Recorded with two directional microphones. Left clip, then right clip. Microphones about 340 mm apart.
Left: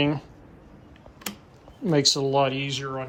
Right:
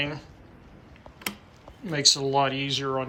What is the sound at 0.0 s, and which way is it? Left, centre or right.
Speech, centre.